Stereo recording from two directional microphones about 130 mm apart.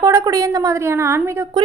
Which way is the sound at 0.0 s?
25° right (ahead or behind).